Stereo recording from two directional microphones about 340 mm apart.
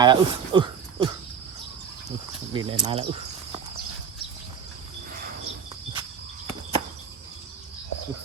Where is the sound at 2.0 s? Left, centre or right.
Centre.